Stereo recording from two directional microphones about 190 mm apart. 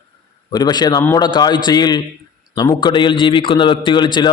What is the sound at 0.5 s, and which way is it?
A man's voice, 20° left (ahead or behind).